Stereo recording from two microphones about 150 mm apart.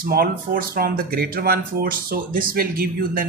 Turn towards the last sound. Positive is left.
turn(degrees=-75)  # may be behind; listen again after turning